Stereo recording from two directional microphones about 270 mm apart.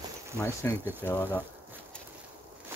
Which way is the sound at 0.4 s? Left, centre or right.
Centre.